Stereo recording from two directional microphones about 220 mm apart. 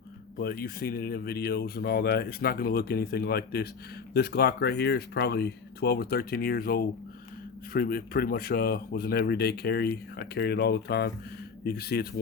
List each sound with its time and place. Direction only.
0.3 s speech: 45° left (ahead or behind)